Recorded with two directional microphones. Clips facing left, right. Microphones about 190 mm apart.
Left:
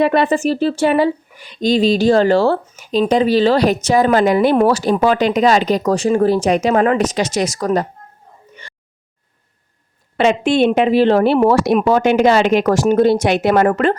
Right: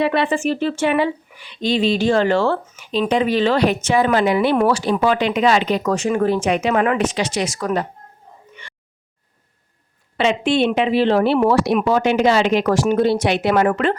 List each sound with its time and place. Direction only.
0.0 s speech: 45° left (ahead or behind)
10.2 s speech: 45° left (ahead or behind)